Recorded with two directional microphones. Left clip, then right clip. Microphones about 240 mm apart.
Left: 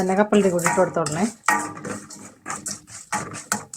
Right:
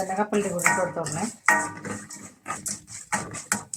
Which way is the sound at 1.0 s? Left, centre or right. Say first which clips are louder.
Left 7 dB; left.